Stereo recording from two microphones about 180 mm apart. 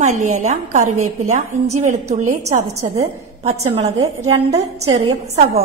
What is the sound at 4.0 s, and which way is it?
A woman's voice, 20° right (ahead or behind).